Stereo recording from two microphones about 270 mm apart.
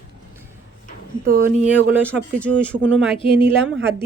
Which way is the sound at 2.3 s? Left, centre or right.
Centre.